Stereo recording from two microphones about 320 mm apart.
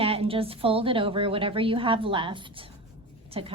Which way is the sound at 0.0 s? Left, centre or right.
Centre.